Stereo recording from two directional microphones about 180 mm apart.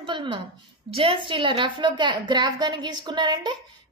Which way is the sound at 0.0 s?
25° right (ahead or behind).